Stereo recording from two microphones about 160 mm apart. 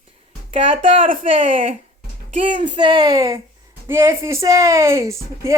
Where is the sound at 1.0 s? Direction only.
55° right (ahead or behind).